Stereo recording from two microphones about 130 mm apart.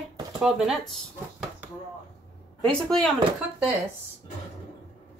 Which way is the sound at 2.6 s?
5° left (ahead or behind).